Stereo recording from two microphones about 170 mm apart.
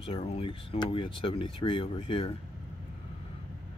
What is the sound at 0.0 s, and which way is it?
Speech, 35° left (ahead or behind).